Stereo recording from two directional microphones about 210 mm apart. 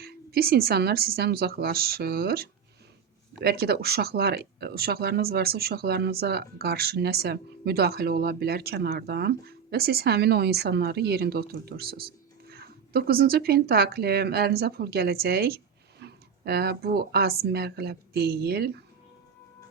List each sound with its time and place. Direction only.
0.0 s speech: 50° right (ahead or behind)